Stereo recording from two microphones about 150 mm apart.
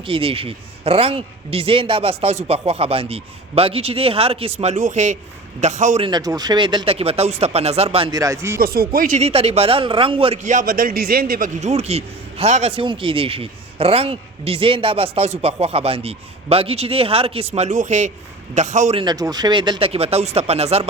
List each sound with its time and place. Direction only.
0.0 s a man's voice: 35° right (ahead or behind); by 6.1 s 50° right (ahead or behind)
6.1 s a man's voice: 25° right (ahead or behind)
8.1 s speech: 20° right (ahead or behind)
8.5 s speech: 85° right
9.1 s a man's voice: 45° right (ahead or behind)
10.4 s a man's voice: 60° right (ahead or behind)
18.9 s a man's voice: 25° right (ahead or behind); by 20.8 s 45° right (ahead or behind)